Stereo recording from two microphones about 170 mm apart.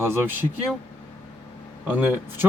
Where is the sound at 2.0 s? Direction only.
10° right (ahead or behind).